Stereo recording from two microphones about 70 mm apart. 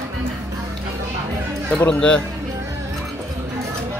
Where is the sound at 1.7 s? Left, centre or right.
Centre.